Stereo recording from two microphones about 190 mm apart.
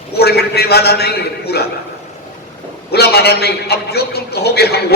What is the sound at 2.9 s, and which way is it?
A man's voice, 55° left (ahead or behind).